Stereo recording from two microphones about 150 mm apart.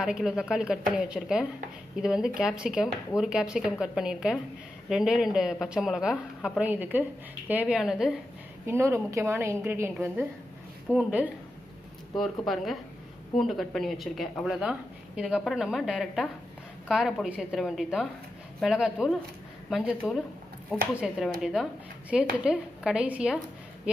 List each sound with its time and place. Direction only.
0.0 s speech: 5° right (ahead or behind)
8.6 s a woman's voice: 15° right (ahead or behind)